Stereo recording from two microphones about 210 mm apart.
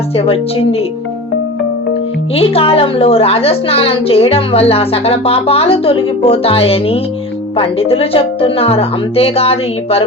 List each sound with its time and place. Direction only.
0.2 s a woman's voice: 25° left (ahead or behind)
2.3 s a woman's voice: 25° left (ahead or behind)